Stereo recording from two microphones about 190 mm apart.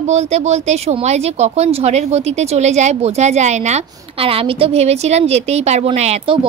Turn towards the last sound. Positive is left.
turn(degrees=-30)  # may be behind; listen again after turning